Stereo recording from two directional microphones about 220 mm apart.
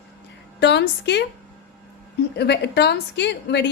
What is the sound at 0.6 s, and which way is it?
Speech, 50° left (ahead or behind).